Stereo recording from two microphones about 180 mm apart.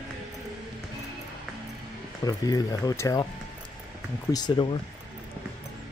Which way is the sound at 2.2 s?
20° left (ahead or behind).